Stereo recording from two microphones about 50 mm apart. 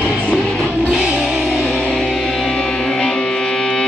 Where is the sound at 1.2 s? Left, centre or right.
Centre.